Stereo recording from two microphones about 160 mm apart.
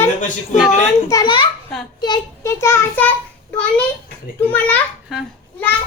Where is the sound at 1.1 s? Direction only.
25° left (ahead or behind).